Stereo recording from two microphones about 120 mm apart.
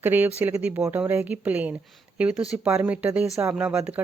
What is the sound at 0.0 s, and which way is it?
A woman's voice, 15° right (ahead or behind).